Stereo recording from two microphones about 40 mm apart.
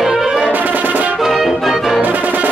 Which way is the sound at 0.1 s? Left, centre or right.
Centre.